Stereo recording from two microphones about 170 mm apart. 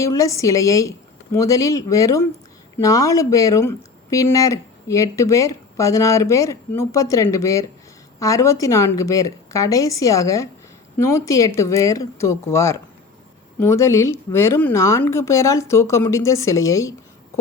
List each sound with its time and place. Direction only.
0.0 s a woman's voice: 20° left (ahead or behind)